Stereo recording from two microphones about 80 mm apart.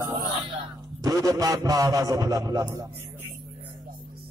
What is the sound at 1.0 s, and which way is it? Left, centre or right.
A man's voice, right.